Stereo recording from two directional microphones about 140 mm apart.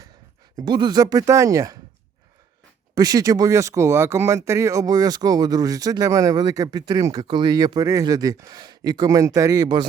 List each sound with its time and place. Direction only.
0.5 s speech: 30° right (ahead or behind)
2.9 s speech: 25° right (ahead or behind)